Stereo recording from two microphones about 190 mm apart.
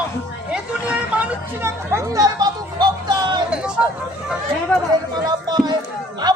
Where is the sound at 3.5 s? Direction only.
5° right (ahead or behind).